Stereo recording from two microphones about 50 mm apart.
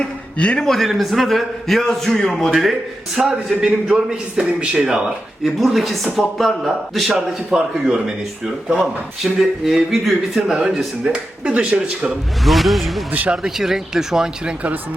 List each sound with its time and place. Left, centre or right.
0.0 s a man's voice: left
0.6 s a man's voice: centre
3.2 s a man's voice: centre
5.4 s a man's voice: centre
11.1 s speech: right
12.5 s a man's voice: centre